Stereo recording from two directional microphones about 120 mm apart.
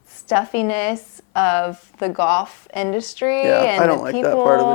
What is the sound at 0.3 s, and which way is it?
A woman's voice, 25° left (ahead or behind).